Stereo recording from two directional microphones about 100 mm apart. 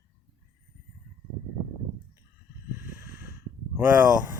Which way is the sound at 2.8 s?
20° right (ahead or behind).